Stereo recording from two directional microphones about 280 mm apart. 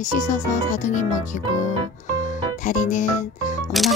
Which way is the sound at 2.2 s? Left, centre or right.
Left.